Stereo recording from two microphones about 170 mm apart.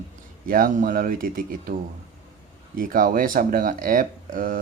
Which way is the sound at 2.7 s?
55° right (ahead or behind).